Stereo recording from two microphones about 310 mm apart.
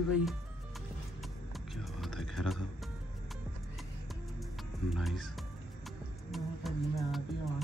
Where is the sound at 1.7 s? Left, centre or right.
Centre.